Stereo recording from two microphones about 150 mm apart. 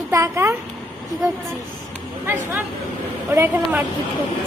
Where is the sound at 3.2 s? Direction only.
15° right (ahead or behind).